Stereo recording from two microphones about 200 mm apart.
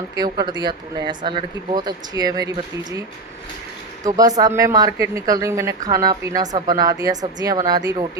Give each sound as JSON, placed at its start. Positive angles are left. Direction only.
{"t": 0.2, "sound": "a woman's voice", "side_deg": -20}
{"t": 4.4, "sound": "a woman's voice", "side_deg": -20}